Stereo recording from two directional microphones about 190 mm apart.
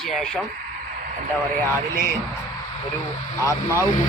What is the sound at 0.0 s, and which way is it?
Speech, centre (ahead or behind).